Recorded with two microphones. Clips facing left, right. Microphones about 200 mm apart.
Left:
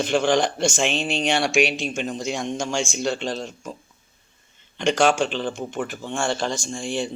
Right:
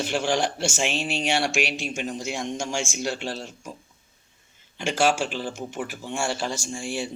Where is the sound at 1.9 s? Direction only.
10° right (ahead or behind).